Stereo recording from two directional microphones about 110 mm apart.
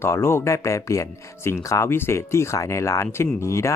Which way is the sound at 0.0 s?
25° left (ahead or behind).